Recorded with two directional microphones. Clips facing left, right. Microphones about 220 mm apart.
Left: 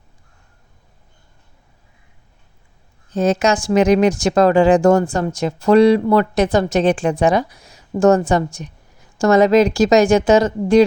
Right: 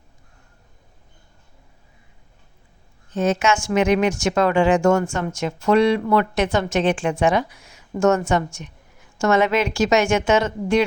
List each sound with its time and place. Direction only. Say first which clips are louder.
3.1 s speech: left 4 dB; 35° left (ahead or behind)